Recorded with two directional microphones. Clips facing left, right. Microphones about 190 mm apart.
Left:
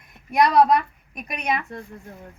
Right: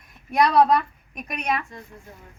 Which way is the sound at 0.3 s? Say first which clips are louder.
Left 1 dB; 5° left (ahead or behind).